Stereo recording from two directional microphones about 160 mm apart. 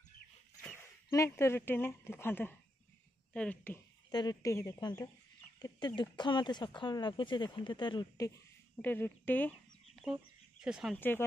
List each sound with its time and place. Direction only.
1.1 s a woman's voice: 15° left (ahead or behind)
4.1 s speech: 25° left (ahead or behind)
8.8 s a woman's voice: 10° left (ahead or behind)
10.1 s speech: 5° right (ahead or behind)
11.0 s a woman's voice: 15° left (ahead or behind)